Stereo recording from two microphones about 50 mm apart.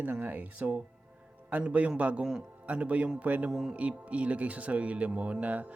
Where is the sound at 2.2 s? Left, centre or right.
Centre.